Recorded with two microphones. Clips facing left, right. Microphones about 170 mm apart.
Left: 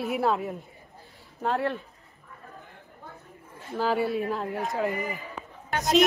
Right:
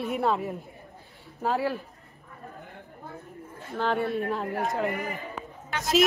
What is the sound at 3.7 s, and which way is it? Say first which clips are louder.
Speech: left 1 dB; 5° left (ahead or behind).